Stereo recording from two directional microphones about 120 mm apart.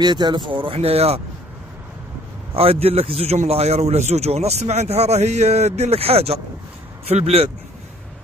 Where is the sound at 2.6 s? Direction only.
55° right (ahead or behind).